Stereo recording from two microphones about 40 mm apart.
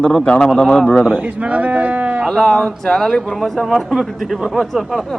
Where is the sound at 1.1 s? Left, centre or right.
Right.